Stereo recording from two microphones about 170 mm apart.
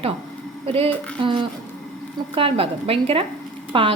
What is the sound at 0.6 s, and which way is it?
Speech, 35° right (ahead or behind).